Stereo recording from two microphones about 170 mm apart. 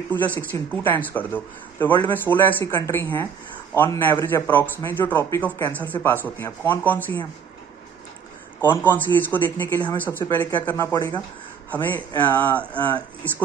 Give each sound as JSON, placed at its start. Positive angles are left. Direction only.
{"t": 0.1, "sound": "a man's voice", "side_deg": 10}
{"t": 8.5, "sound": "a man's voice", "side_deg": 10}
{"t": 10.2, "sound": "speech", "side_deg": 25}
{"t": 11.7, "sound": "a man's voice", "side_deg": 10}